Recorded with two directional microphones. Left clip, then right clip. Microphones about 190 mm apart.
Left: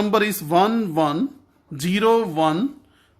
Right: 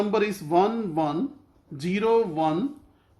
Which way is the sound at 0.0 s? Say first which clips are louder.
Left 4 dB; 45° left (ahead or behind).